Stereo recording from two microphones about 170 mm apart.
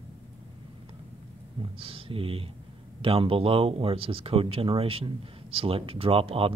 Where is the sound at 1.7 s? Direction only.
30° right (ahead or behind).